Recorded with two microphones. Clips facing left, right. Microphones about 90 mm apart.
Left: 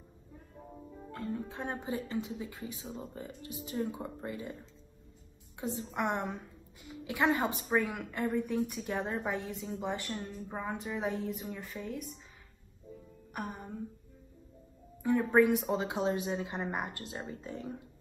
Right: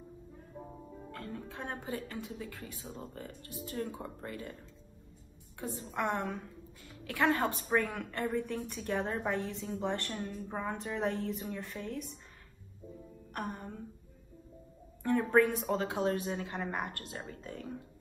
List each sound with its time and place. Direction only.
1.1 s a woman's voice: 20° left (ahead or behind)
5.6 s a woman's voice: 20° left (ahead or behind); by 12.2 s centre (ahead or behind)
13.3 s music: 5° left (ahead or behind)
15.0 s a woman's voice: 10° left (ahead or behind)